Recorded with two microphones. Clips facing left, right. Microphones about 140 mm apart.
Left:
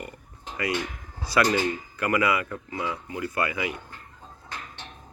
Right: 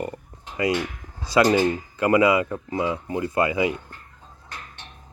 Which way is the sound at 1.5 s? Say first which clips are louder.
Right 6 dB; 25° right (ahead or behind).